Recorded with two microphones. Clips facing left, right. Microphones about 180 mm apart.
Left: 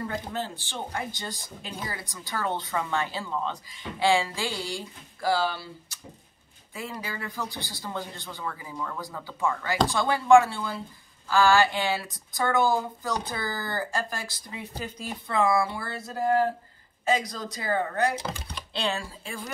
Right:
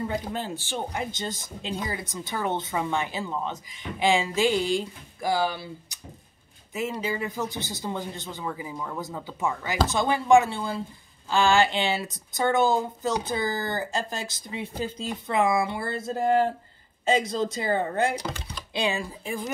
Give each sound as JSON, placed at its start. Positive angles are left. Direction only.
{"t": 0.0, "sound": "speech", "side_deg": -15}
{"t": 18.7, "sound": "speech", "side_deg": -15}